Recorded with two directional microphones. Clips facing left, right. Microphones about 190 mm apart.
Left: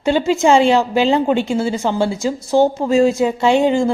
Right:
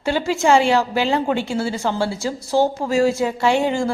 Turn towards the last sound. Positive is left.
turn(degrees=20)  # may be behind; listen again after turning